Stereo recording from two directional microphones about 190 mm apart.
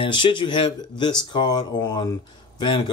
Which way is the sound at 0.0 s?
25° left (ahead or behind).